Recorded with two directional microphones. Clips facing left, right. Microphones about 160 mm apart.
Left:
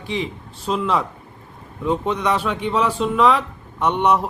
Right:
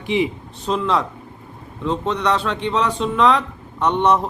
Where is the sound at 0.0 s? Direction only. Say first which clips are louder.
Right 6 dB; 15° right (ahead or behind).